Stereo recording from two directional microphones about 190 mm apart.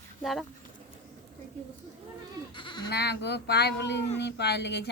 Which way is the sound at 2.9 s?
60° left (ahead or behind).